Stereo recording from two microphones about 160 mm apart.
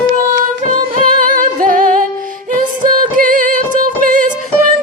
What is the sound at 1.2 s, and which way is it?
Music, 55° right (ahead or behind).